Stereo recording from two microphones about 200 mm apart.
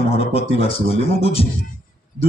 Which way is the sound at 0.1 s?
30° left (ahead or behind).